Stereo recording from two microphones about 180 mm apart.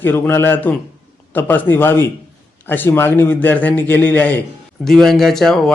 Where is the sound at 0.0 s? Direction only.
10° left (ahead or behind).